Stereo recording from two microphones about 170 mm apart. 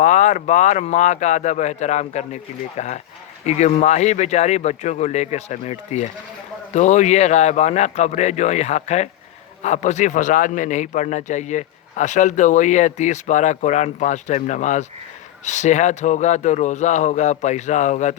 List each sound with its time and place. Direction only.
0.0 s a man's voice: 45° left (ahead or behind)